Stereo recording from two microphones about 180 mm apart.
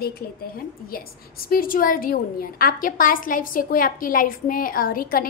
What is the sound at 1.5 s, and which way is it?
A woman's voice, 50° left (ahead or behind).